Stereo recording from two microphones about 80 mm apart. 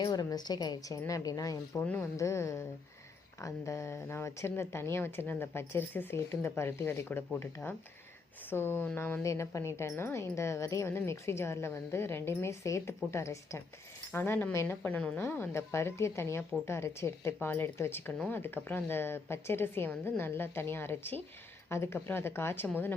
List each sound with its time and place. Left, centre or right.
0.0 s a woman's voice: left
1.8 s a woman's voice: left
2.1 s a woman's voice: left
9.2 s speech: left
14.1 s a woman's voice: left
14.5 s speech: left
14.8 s a woman's voice: centre
15.2 s a woman's voice: left